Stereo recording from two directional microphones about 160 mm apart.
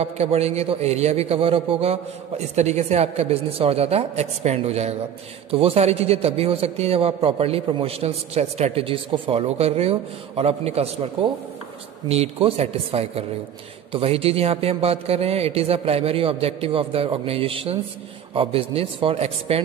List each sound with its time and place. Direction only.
0.0 s a man's voice: 40° right (ahead or behind)